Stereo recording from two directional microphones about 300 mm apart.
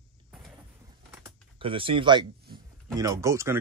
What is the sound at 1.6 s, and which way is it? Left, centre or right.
Speech, centre.